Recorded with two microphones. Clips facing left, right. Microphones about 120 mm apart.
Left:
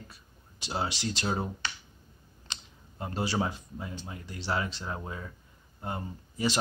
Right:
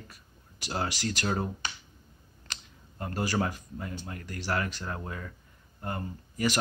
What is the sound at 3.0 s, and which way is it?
A man's voice, 20° left (ahead or behind).